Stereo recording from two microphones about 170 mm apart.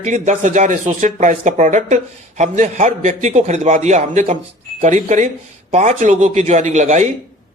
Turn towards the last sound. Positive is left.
turn(degrees=-45)  # may be behind; listen again after turning